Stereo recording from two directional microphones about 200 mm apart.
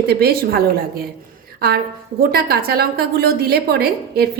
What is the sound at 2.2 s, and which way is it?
A woman's voice, 50° right (ahead or behind).